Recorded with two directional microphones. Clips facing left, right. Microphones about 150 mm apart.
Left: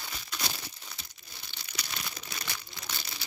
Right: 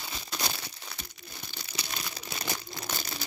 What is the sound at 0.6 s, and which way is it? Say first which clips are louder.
Crumpling: right 3 dB; 65° right (ahead or behind).